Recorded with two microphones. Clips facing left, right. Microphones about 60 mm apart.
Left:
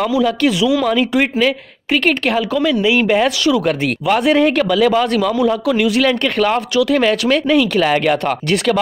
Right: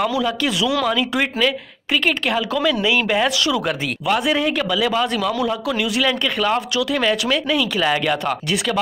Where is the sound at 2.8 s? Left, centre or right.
Left.